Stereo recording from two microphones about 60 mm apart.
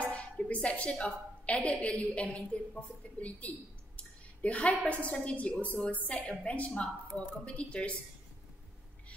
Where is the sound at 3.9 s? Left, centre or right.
Left.